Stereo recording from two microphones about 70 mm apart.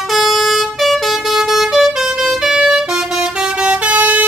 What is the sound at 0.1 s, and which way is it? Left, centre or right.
Vehicle, centre.